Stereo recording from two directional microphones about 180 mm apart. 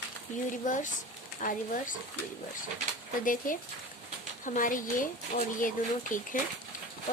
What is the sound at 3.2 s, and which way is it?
Speech, 50° left (ahead or behind).